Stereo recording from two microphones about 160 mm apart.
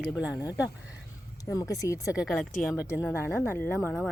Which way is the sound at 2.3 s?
10° left (ahead or behind).